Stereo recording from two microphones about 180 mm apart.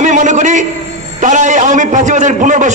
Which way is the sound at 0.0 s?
45° right (ahead or behind).